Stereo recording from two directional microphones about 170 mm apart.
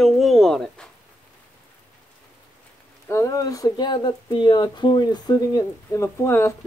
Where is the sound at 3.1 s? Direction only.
20° left (ahead or behind).